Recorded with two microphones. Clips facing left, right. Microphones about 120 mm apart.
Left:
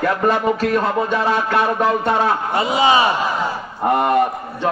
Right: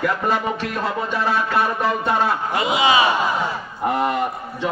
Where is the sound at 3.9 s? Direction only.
60° left (ahead or behind).